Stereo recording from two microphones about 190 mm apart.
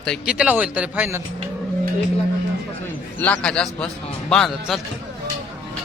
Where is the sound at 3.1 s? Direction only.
10° left (ahead or behind).